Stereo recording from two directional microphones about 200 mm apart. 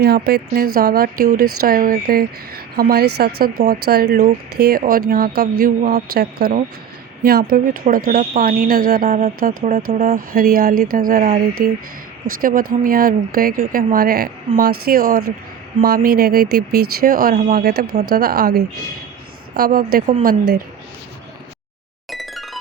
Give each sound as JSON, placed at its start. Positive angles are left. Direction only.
{"t": 0.0, "sound": "speech", "side_deg": -50}
{"t": 22.1, "sound": "music", "side_deg": 0}